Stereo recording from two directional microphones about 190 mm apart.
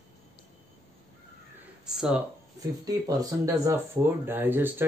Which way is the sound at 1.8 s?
5° right (ahead or behind).